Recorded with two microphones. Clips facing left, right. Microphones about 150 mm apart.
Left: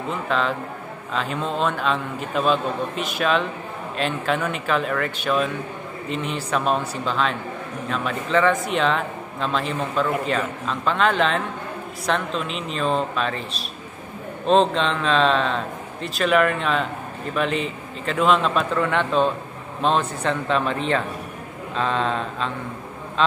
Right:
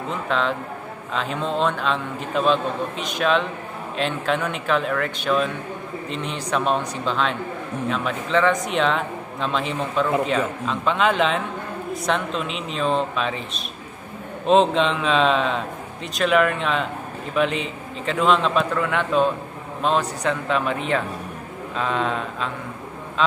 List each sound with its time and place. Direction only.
0.3 s a man's voice: centre (ahead or behind)